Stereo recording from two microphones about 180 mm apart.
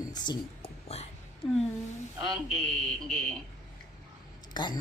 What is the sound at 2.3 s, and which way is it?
Speech, 5° left (ahead or behind).